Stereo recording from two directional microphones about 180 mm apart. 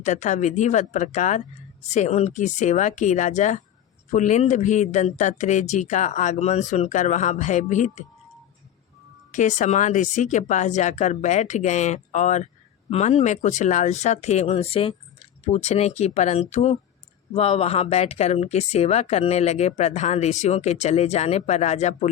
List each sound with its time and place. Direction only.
0.0 s speech: 40° left (ahead or behind)
9.3 s speech: 40° left (ahead or behind)